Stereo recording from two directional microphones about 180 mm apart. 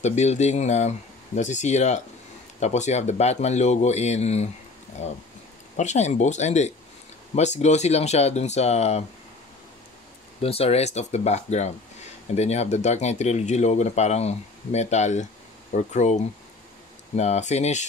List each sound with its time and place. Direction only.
0.0 s speech: 40° left (ahead or behind)
10.4 s speech: 35° left (ahead or behind)